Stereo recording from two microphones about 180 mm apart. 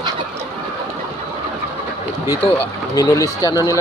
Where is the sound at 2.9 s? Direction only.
20° left (ahead or behind).